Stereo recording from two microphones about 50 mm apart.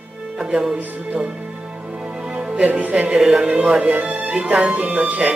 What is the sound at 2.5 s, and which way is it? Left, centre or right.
Music, right.